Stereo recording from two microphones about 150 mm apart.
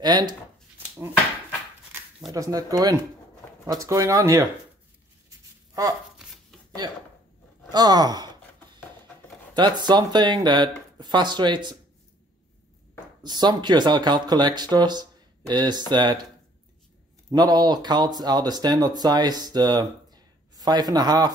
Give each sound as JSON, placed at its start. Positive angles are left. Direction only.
{"t": 0.0, "sound": "speech", "side_deg": -30}
{"t": 2.3, "sound": "speech", "side_deg": -25}
{"t": 6.8, "sound": "speech", "side_deg": -25}
{"t": 9.5, "sound": "speech", "side_deg": -30}
{"t": 13.2, "sound": "speech", "side_deg": -30}
{"t": 17.3, "sound": "speech", "side_deg": -25}